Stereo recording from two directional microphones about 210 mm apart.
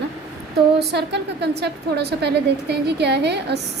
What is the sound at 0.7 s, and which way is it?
A woman's voice, 55° right (ahead or behind).